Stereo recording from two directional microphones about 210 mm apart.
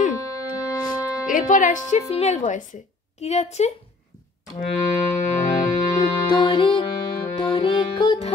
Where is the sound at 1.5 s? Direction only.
35° left (ahead or behind).